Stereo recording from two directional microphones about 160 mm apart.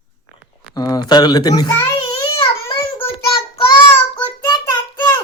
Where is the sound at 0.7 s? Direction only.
25° left (ahead or behind).